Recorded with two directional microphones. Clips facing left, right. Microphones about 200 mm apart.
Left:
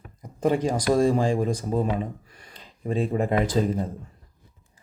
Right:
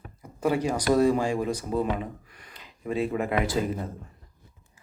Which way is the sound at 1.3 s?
35° left (ahead or behind).